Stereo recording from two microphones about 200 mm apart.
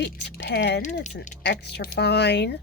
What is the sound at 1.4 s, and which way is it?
Speech, 55° left (ahead or behind).